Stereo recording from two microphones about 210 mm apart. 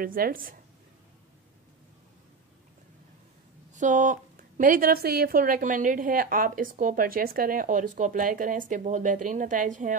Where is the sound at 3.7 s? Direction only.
35° right (ahead or behind).